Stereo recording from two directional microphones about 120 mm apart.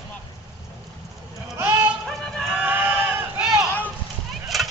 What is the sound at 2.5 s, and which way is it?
Sheep, 15° right (ahead or behind).